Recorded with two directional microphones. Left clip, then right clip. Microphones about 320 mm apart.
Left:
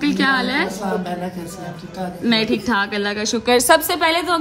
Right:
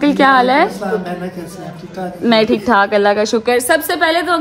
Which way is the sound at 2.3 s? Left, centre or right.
Centre.